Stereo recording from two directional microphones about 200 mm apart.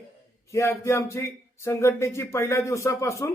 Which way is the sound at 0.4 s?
15° left (ahead or behind).